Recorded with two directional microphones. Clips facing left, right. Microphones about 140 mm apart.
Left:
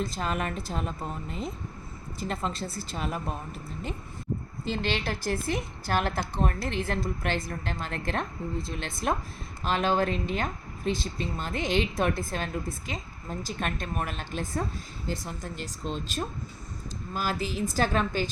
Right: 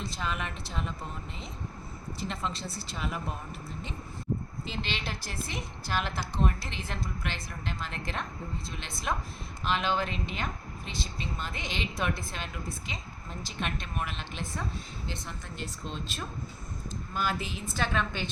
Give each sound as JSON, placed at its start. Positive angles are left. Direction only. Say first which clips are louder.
{"t": 0.0, "sound": "a woman's voice", "louder": "left 5 dB", "side_deg": 45}
{"t": 4.7, "sound": "a woman's voice", "louder": "left 7 dB", "side_deg": 50}